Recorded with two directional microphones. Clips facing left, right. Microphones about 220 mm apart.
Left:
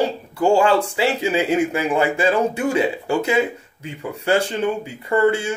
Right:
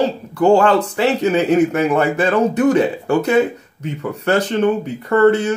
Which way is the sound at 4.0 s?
10° left (ahead or behind).